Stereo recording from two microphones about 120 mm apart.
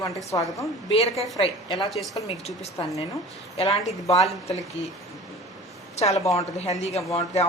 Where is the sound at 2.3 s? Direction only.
60° left (ahead or behind).